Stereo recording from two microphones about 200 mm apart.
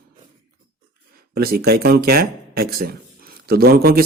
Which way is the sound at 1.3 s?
50° right (ahead or behind).